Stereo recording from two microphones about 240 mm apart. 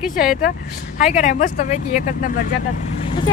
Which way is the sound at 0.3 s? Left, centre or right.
Left.